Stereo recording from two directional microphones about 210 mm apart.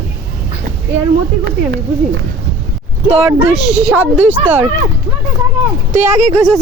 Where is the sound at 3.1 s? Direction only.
30° right (ahead or behind).